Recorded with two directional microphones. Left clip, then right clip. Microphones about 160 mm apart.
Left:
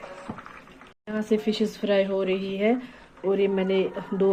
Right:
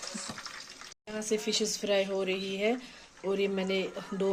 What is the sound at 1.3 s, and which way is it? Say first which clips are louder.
Speech: left 5 dB; 10° right (ahead or behind).